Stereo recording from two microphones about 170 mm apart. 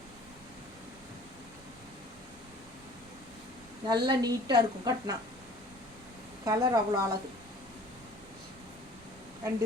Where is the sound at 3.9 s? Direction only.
25° right (ahead or behind).